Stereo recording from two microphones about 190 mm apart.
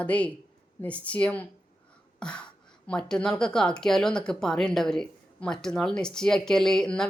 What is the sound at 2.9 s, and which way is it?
Speech, 5° left (ahead or behind).